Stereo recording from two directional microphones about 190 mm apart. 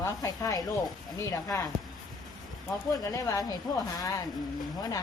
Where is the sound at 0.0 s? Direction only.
20° left (ahead or behind).